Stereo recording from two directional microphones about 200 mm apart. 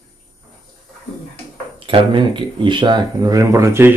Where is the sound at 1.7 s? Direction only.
25° right (ahead or behind).